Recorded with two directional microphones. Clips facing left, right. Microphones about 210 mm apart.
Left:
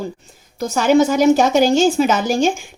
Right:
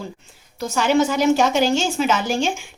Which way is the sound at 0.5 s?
40° left (ahead or behind).